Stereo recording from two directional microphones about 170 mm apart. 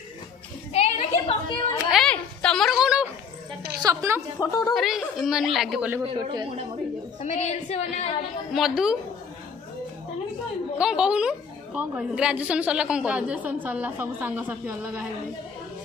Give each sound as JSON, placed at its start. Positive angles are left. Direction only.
{"t": 0.7, "sound": "a sound", "side_deg": 35}
{"t": 1.9, "sound": "a sound", "side_deg": 5}
{"t": 3.8, "sound": "a woman's voice", "side_deg": -20}
{"t": 4.4, "sound": "a woman's voice", "side_deg": 20}
{"t": 4.7, "sound": "speech", "side_deg": 0}
{"t": 6.3, "sound": "speech", "side_deg": -25}
{"t": 7.2, "sound": "a woman's voice", "side_deg": 40}
{"t": 8.5, "sound": "speech", "side_deg": 0}
{"t": 10.8, "sound": "a woman's voice", "side_deg": -5}